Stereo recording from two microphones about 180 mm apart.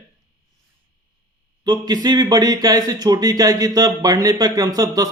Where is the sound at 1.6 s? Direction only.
20° right (ahead or behind).